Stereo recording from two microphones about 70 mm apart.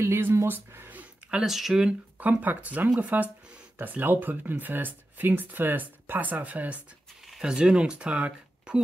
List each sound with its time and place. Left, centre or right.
0.0 s speech: right
1.4 s speech: centre
2.1 s speech: right
7.2 s speech: centre